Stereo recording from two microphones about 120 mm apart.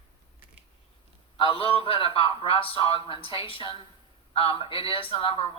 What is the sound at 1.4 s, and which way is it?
Speech, 50° left (ahead or behind).